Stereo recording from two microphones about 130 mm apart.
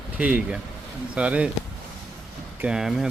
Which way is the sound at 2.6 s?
5° right (ahead or behind).